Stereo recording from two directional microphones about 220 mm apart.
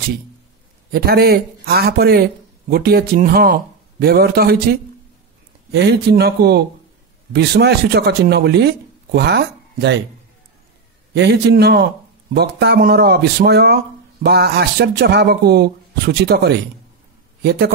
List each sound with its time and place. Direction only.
0.9 s speech: 45° right (ahead or behind)
11.1 s a man's voice: 50° right (ahead or behind)